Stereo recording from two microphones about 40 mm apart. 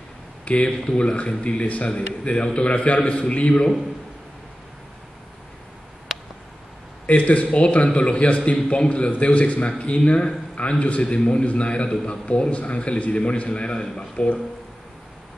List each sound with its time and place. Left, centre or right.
0.7 s a man's voice: left
6.1 s a sound: centre
7.1 s a man's voice: left
12.3 s a man's voice: left